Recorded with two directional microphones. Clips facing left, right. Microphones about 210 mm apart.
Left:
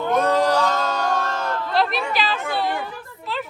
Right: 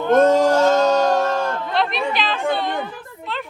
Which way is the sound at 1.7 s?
Centre (ahead or behind).